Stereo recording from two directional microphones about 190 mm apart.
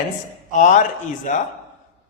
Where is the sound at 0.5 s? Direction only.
40° left (ahead or behind).